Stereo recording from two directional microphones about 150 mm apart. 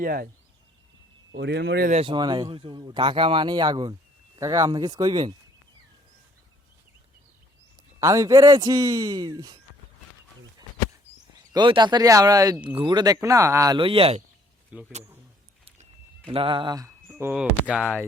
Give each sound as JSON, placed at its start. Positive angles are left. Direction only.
{"t": 0.0, "sound": "speech", "side_deg": -75}
{"t": 1.4, "sound": "speech", "side_deg": -90}
{"t": 2.0, "sound": "a man's voice", "side_deg": -30}
{"t": 8.0, "sound": "a man's voice", "side_deg": -20}
{"t": 11.5, "sound": "a man's voice", "side_deg": -30}
{"t": 13.7, "sound": "speech", "side_deg": -40}
{"t": 14.7, "sound": "speech", "side_deg": -10}
{"t": 15.6, "sound": "a sound", "side_deg": -40}
{"t": 17.3, "sound": "speech", "side_deg": -5}